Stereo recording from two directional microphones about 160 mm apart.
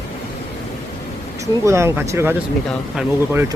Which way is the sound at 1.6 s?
15° right (ahead or behind).